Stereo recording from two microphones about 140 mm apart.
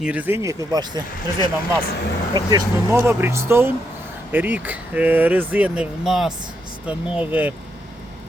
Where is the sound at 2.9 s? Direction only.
15° right (ahead or behind).